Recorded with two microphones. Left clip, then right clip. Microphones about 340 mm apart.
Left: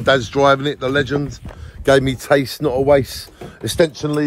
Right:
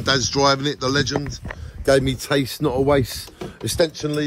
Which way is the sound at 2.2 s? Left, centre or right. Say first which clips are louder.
Left 5 dB; centre.